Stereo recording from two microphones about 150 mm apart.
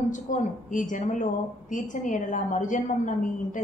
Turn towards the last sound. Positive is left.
turn(degrees=55)  # may be behind; listen again after turning